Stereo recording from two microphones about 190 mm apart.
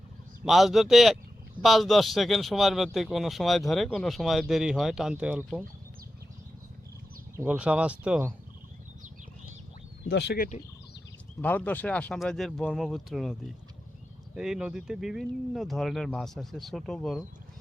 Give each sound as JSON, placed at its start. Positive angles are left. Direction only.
{"t": 0.4, "sound": "speech", "side_deg": 0}
{"t": 7.3, "sound": "speech", "side_deg": -10}
{"t": 10.1, "sound": "speech", "side_deg": 60}
{"t": 11.4, "sound": "speech", "side_deg": 10}
{"t": 14.3, "sound": "speech", "side_deg": -5}